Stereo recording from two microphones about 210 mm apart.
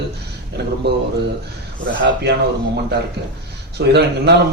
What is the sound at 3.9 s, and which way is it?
Speech, 50° right (ahead or behind).